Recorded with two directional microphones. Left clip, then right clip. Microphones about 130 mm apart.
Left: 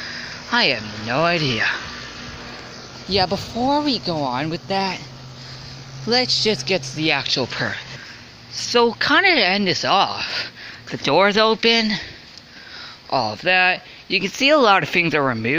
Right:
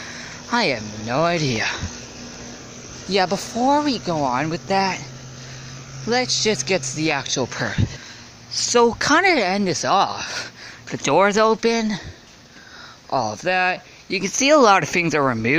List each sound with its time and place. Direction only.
0.0 s speech: 20° right (ahead or behind)
3.1 s speech: 10° right (ahead or behind)
6.0 s speech: 5° left (ahead or behind); by 7.8 s 10° right (ahead or behind)
8.5 s a sound: 10° right (ahead or behind)
8.9 s speech: 25° right (ahead or behind)
13.1 s speech: 15° right (ahead or behind)